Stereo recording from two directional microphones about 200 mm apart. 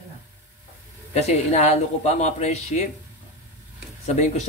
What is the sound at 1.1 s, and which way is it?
Speech, 35° left (ahead or behind).